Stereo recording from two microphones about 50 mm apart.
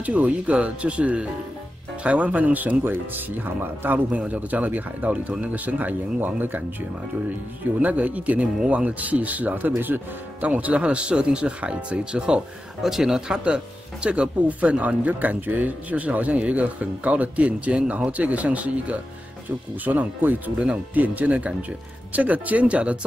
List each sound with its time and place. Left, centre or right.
0.0 s speech: right
12.8 s speech: centre; by 20.5 s right
20.5 s speech: right
20.9 s speech: right